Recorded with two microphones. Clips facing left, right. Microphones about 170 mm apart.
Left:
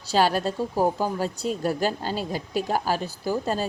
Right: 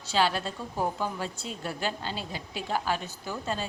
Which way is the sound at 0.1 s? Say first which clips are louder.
Left 5 dB; 40° left (ahead or behind).